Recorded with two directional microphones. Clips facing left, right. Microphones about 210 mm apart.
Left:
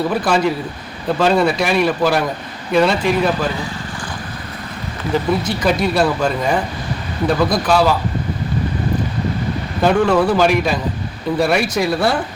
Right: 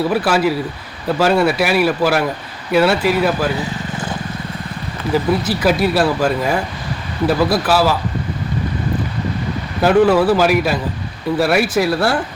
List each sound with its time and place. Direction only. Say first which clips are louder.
0.1 s speech: right 1 dB; 5° right (ahead or behind)
5.3 s speech: right 1 dB; 5° right (ahead or behind)
9.8 s speech: right 2 dB; 5° right (ahead or behind)